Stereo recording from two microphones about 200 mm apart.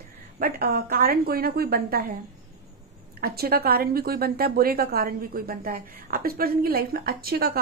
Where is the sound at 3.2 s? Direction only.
50° right (ahead or behind).